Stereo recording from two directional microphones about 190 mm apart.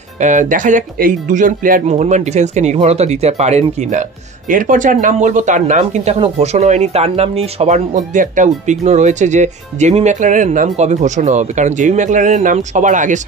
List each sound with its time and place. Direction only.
0.2 s speech: 40° right (ahead or behind)